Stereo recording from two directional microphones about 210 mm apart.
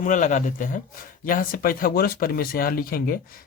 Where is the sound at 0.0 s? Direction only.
40° left (ahead or behind).